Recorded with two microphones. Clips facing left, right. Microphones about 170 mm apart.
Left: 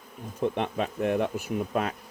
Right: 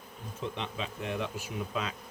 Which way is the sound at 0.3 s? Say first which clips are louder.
Left 9 dB; 55° left (ahead or behind).